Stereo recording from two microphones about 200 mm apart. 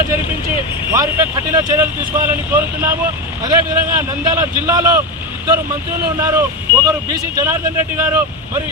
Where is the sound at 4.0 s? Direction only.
15° right (ahead or behind).